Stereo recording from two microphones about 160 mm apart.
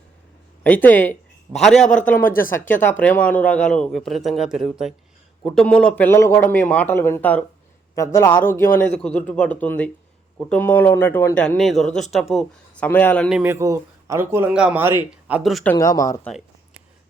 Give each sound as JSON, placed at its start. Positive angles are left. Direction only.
{"t": 0.6, "sound": "a man's voice", "side_deg": 10}
{"t": 11.4, "sound": "a man's voice", "side_deg": 0}
{"t": 13.3, "sound": "a man's voice", "side_deg": -15}
{"t": 15.6, "sound": "speech", "side_deg": 15}